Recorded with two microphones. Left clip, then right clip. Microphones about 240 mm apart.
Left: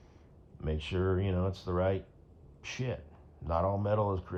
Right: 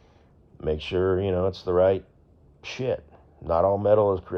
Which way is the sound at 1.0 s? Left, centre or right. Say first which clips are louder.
Right 9 dB; right.